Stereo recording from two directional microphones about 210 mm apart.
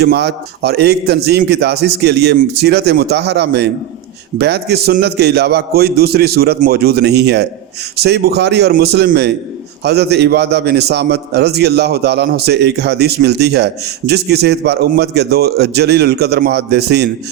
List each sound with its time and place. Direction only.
0.0 s a man's voice: 50° right (ahead or behind)